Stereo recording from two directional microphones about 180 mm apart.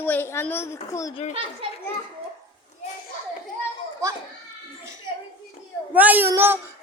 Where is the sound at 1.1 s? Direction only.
40° left (ahead or behind).